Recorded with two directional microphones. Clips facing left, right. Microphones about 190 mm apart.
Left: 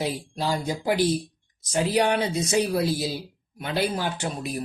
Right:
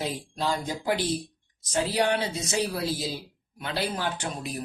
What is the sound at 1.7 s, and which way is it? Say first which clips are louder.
Speech: left 3 dB; 15° left (ahead or behind).